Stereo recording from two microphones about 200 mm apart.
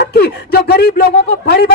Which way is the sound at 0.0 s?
50° left (ahead or behind).